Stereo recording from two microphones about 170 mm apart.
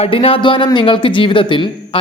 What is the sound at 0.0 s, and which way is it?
A man's voice, 35° left (ahead or behind).